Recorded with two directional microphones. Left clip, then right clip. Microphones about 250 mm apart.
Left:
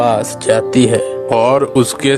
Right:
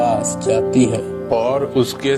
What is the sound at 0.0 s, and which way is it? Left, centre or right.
Speech, left.